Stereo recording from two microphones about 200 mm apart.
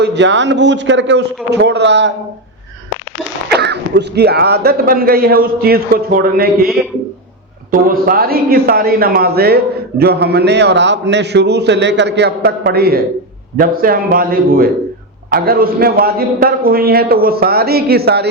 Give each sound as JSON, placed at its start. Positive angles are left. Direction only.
{"t": 0.0, "sound": "a man's voice", "side_deg": -60}
{"t": 3.5, "sound": "a man's voice", "side_deg": -55}
{"t": 7.7, "sound": "a man's voice", "side_deg": -45}